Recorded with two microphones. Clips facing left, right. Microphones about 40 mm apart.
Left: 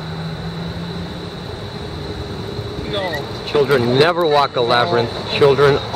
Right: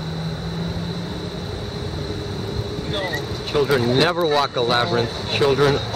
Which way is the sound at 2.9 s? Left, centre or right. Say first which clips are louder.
Left 4 dB; centre.